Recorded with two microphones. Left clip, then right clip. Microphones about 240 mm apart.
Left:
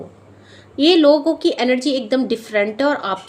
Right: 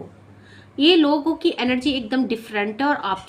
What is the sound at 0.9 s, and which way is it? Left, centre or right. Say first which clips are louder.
A woman's voice: left 6 dB; centre.